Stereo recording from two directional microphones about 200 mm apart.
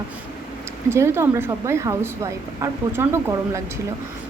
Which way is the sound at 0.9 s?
10° right (ahead or behind).